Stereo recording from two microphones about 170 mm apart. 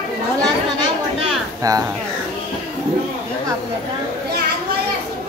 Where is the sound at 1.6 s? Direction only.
20° right (ahead or behind).